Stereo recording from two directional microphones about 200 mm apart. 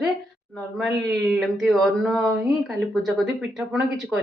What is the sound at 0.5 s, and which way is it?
Speech, centre (ahead or behind).